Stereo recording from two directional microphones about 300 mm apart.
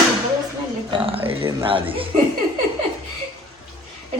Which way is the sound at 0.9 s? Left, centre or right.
Centre.